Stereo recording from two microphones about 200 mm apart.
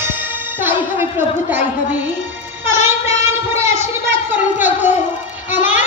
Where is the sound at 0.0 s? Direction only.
10° right (ahead or behind).